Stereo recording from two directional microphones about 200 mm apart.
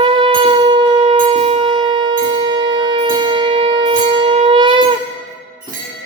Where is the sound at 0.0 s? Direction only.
25° right (ahead or behind).